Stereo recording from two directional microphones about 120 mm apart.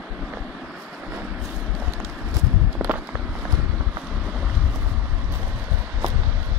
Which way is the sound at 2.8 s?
10° right (ahead or behind).